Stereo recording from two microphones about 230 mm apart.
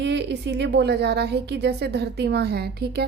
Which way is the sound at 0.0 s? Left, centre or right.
Right.